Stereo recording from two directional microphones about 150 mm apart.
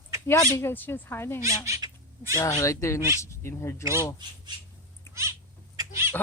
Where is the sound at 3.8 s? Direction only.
15° right (ahead or behind).